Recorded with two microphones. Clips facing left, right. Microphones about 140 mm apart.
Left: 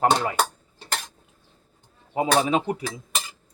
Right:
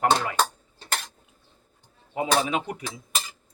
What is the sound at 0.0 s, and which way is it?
Speech, 30° left (ahead or behind).